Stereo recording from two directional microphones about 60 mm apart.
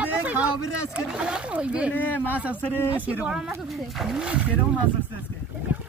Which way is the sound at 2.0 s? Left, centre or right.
Left.